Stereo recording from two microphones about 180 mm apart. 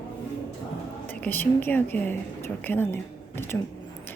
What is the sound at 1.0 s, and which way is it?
A woman's voice, 10° left (ahead or behind).